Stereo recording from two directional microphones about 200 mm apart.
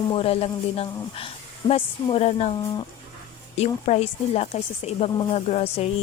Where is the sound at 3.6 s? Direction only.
30° left (ahead or behind).